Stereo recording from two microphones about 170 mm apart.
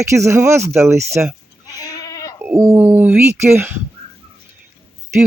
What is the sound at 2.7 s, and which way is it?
Speech, 10° right (ahead or behind).